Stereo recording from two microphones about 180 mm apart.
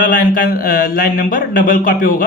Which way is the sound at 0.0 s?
50° left (ahead or behind).